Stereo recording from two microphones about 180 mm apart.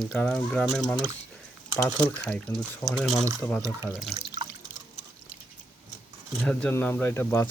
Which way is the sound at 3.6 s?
15° right (ahead or behind).